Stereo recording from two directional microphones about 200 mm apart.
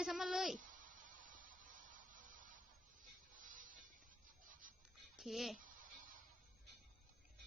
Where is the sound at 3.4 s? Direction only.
40° right (ahead or behind).